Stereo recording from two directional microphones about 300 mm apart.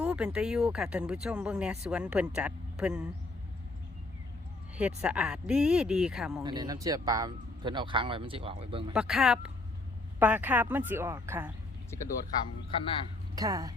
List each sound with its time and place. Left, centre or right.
0.0 s speech: centre
4.8 s speech: centre
6.4 s speech: centre
8.9 s speech: centre
12.7 s speech: centre
13.3 s speech: centre